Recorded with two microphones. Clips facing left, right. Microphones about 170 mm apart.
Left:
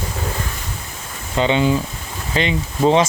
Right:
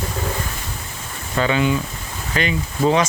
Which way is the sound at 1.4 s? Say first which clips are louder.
Left 2 dB; 25° left (ahead or behind).